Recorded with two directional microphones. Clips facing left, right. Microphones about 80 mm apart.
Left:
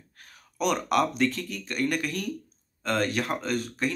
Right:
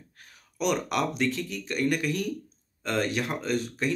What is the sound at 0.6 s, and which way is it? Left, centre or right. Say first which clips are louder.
Speech: left 2 dB; centre.